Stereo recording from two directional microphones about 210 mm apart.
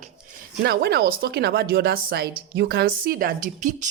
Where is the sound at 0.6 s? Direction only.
50° right (ahead or behind).